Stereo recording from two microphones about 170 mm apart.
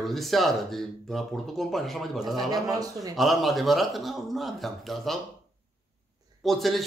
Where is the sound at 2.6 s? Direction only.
20° right (ahead or behind).